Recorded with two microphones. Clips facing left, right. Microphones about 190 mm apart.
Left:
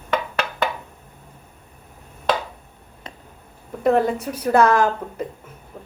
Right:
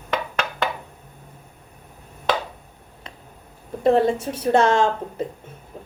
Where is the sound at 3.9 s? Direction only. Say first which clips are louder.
Right 1 dB; 25° right (ahead or behind).